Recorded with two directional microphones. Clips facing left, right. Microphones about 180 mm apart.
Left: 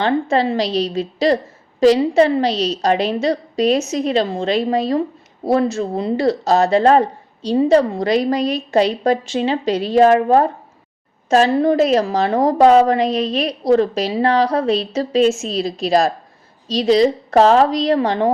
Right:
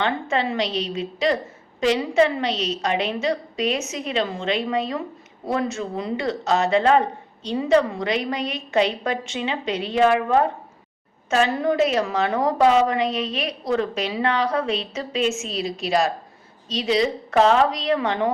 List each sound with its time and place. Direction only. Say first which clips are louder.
0.0 s speech: left 6 dB; 35° left (ahead or behind)